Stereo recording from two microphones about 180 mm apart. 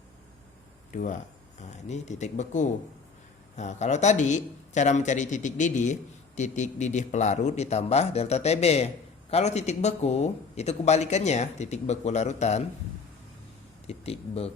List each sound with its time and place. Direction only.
1.9 s a man's voice: 40° left (ahead or behind)
13.8 s a man's voice: 35° left (ahead or behind)